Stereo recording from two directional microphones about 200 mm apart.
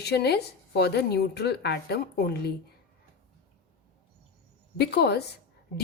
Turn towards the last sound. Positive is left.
turn(degrees=55)  # may be behind; listen again after turning